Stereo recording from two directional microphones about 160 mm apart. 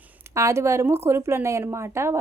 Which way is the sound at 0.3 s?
15° right (ahead or behind).